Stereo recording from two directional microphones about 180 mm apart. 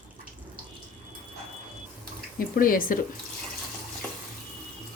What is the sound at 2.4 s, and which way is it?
Speech, 50° left (ahead or behind).